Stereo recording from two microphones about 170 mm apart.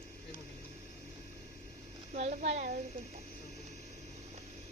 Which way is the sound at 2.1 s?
40° right (ahead or behind).